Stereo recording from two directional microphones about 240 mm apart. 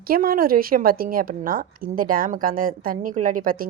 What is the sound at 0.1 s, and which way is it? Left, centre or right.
A woman's voice, right.